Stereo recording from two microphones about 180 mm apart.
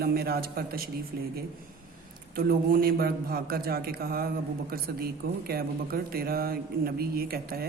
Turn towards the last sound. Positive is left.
turn(degrees=-55)  # may be behind; listen again after turning